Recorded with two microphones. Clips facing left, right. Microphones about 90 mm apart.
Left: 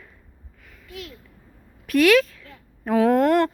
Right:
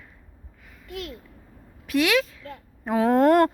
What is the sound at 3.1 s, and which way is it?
Speech, 40° right (ahead or behind).